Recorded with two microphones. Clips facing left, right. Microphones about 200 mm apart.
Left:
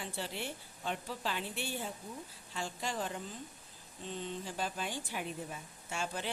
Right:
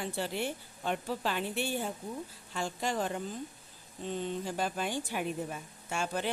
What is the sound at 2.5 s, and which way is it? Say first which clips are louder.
Speech: right 5 dB; 55° right (ahead or behind).